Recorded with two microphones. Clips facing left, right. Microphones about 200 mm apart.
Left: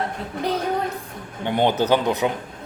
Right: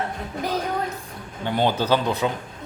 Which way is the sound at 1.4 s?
20° left (ahead or behind).